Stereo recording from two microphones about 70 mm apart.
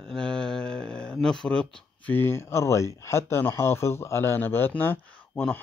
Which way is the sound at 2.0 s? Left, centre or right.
Left.